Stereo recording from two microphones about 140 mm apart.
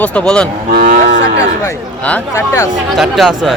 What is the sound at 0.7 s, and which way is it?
Cattle, 80° right.